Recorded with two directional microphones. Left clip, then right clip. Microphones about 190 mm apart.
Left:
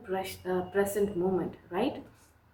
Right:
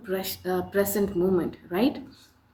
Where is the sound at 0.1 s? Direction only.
55° right (ahead or behind).